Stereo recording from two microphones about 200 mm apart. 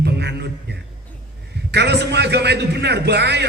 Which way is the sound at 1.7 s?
55° right (ahead or behind).